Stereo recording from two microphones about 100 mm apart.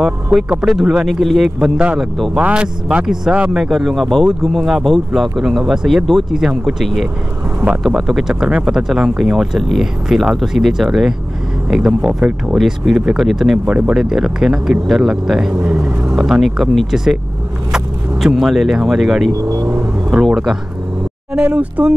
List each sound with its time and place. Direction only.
0.0 s speech: 5° right (ahead or behind)
0.5 s speech: 15° right (ahead or behind); by 2.3 s centre (ahead or behind)
2.3 s speech: 10° right (ahead or behind)
13.7 s speech: 10° right (ahead or behind)
15.5 s speech: 20° right (ahead or behind)
16.2 s speech: 5° right (ahead or behind)
21.3 s speech: 15° right (ahead or behind)